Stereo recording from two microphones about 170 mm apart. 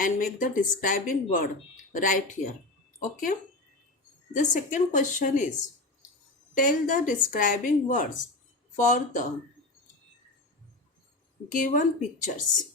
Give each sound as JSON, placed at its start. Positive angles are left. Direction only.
{"t": 0.0, "sound": "speech", "side_deg": 50}
{"t": 4.4, "sound": "speech", "side_deg": 50}
{"t": 6.5, "sound": "speech", "side_deg": 50}
{"t": 11.4, "sound": "speech", "side_deg": 50}